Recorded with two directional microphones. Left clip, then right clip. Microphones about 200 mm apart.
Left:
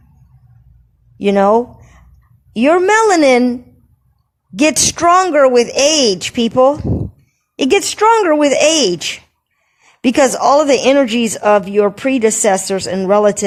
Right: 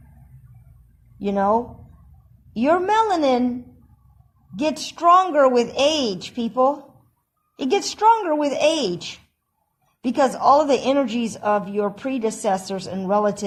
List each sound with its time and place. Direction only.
1.2 s a woman's voice: 30° left (ahead or behind)
4.5 s speech: 30° left (ahead or behind)